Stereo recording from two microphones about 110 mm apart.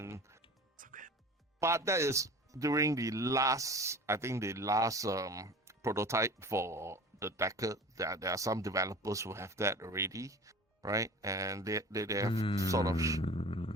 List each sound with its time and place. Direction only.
0.0 s music: 25° right (ahead or behind)
1.5 s speech: 25° right (ahead or behind)
12.3 s speech: 50° left (ahead or behind)
12.5 s mantra: 30° right (ahead or behind)
13.2 s a sound: 55° left (ahead or behind)